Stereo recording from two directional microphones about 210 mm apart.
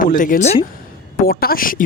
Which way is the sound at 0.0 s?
40° left (ahead or behind).